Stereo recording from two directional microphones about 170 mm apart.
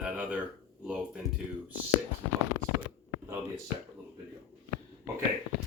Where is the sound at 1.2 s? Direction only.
20° left (ahead or behind).